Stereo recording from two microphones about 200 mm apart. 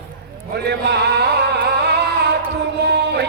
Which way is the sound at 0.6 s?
55° right (ahead or behind).